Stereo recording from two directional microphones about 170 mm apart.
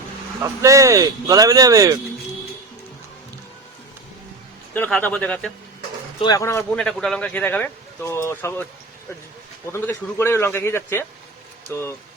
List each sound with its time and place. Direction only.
0.4 s speech: 20° right (ahead or behind)
4.7 s speech: 10° left (ahead or behind)
6.1 s speech: 25° left (ahead or behind)
6.7 s speech: 5° left (ahead or behind)
9.7 s speech: 15° left (ahead or behind)